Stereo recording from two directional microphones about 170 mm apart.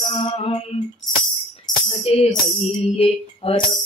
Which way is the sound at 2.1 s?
35° left (ahead or behind).